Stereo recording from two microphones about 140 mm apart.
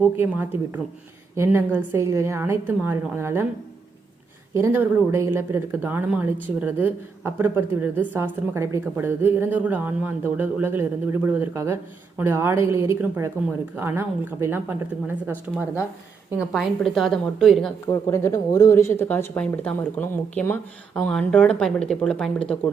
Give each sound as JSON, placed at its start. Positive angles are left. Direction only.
{"t": 0.0, "sound": "speech", "side_deg": -15}
{"t": 4.6, "sound": "speech", "side_deg": -20}
{"t": 16.4, "sound": "a woman's voice", "side_deg": 0}
{"t": 17.8, "sound": "speech", "side_deg": 20}